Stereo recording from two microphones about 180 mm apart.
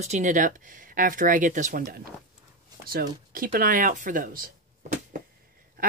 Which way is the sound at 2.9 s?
55° right (ahead or behind).